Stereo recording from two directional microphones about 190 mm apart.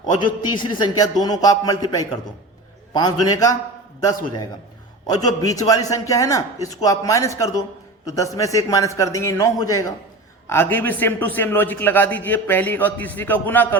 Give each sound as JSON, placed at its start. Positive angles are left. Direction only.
{"t": 0.2, "sound": "a man's voice", "side_deg": 25}
{"t": 5.0, "sound": "a man's voice", "side_deg": 20}